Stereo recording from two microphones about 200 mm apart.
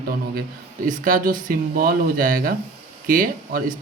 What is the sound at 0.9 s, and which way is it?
Speech, 40° right (ahead or behind).